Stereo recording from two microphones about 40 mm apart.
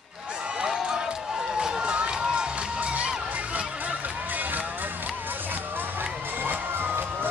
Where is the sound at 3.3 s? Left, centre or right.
Right.